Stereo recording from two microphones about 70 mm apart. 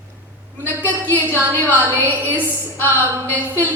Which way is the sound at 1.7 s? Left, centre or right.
Right.